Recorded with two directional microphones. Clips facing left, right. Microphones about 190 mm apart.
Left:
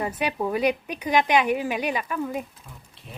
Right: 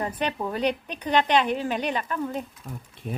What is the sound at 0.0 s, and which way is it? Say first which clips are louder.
Speech: left 2 dB; 10° left (ahead or behind).